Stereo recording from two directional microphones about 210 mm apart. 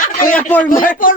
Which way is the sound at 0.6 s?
40° left (ahead or behind).